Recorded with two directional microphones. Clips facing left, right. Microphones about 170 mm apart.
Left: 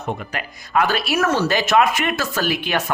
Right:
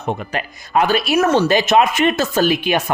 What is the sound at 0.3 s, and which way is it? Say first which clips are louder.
Speech: right 2 dB; 25° right (ahead or behind).